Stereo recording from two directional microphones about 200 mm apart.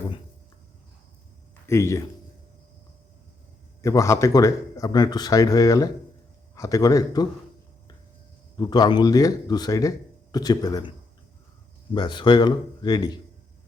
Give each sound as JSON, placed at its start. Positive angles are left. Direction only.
{"t": 1.6, "sound": "a man's voice", "side_deg": 15}
{"t": 3.8, "sound": "speech", "side_deg": 15}
{"t": 8.5, "sound": "speech", "side_deg": 20}
{"t": 11.9, "sound": "speech", "side_deg": 20}